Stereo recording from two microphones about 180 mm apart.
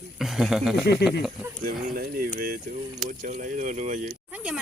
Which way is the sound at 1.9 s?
55° right (ahead or behind).